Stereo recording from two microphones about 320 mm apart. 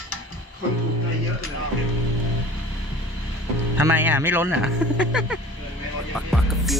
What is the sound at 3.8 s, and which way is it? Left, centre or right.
Music, centre.